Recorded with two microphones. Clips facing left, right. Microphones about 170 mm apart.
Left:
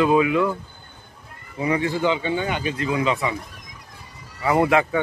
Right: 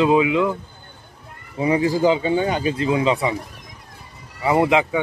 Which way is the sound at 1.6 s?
30° right (ahead or behind).